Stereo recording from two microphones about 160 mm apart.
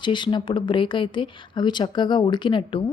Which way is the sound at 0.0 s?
30° left (ahead or behind).